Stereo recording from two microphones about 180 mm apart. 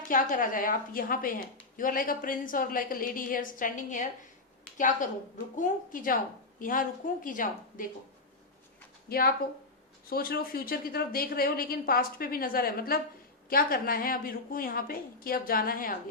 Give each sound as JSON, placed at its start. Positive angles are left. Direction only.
{"t": 0.1, "sound": "a woman's voice", "side_deg": 50}
{"t": 9.0, "sound": "a woman's voice", "side_deg": 60}